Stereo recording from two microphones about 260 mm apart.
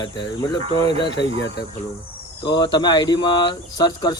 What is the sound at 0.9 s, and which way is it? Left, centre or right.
Speech, right.